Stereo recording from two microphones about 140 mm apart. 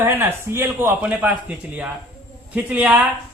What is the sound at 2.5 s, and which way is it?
Speech, 10° right (ahead or behind).